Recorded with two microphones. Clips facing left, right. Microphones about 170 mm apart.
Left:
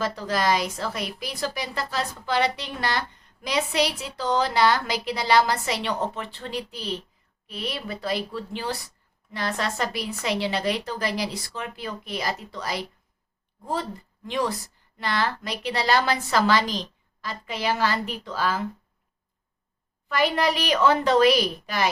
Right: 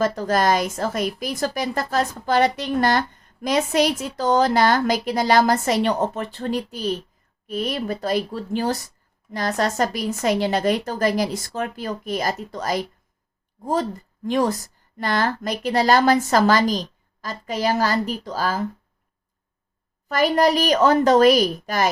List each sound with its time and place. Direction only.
0.0 s speech: 50° right (ahead or behind)
14.3 s speech: 45° right (ahead or behind)
20.1 s speech: 45° right (ahead or behind)